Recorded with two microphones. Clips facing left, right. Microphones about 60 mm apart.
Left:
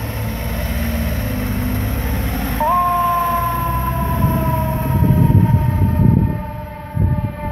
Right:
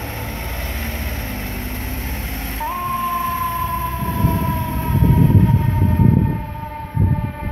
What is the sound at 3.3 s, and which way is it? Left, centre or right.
Emergency vehicle, left.